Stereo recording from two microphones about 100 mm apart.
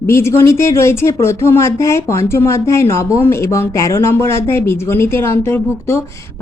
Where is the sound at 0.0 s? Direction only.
25° left (ahead or behind).